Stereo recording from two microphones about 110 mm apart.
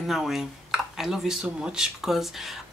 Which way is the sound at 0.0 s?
Centre (ahead or behind).